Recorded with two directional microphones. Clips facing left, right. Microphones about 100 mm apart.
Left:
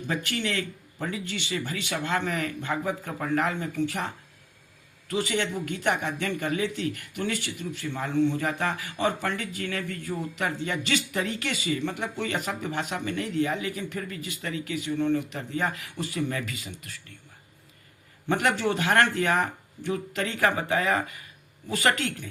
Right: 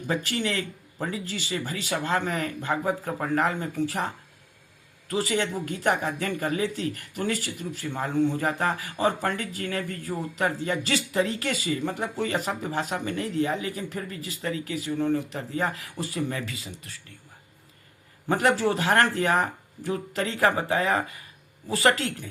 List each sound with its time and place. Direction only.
0.1 s a man's voice: 35° right (ahead or behind)
18.3 s a man's voice: 35° right (ahead or behind)